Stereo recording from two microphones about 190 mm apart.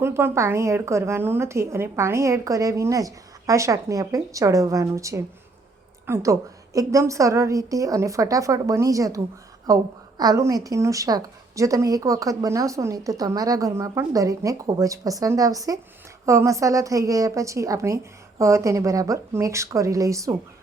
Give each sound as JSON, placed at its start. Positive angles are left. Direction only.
{"t": 0.0, "sound": "a woman's voice", "side_deg": -10}